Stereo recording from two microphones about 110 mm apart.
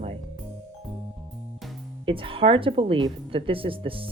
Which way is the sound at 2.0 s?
55° right (ahead or behind).